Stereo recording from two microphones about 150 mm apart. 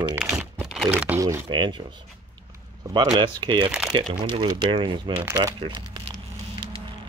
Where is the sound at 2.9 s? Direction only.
30° right (ahead or behind).